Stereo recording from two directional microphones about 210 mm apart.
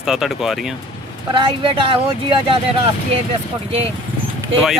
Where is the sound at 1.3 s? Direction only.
25° right (ahead or behind).